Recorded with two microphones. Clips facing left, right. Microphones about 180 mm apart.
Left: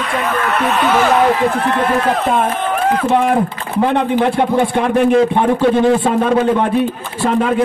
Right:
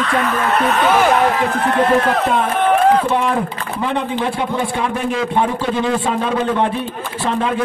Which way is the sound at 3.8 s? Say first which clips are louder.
Left 7 dB; 55° left (ahead or behind).